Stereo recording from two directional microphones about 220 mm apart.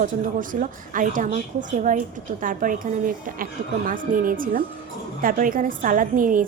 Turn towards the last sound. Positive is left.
turn(degrees=-35)  # may be behind; listen again after turning